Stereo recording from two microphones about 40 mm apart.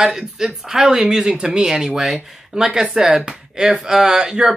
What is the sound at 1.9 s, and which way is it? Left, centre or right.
Speech, centre.